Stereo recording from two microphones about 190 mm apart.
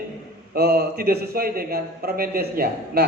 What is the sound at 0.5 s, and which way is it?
A man's voice, 55° right (ahead or behind).